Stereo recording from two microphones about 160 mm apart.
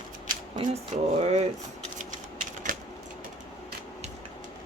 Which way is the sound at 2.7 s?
60° right (ahead or behind).